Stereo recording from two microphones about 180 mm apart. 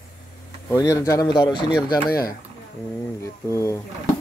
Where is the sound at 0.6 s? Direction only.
15° left (ahead or behind).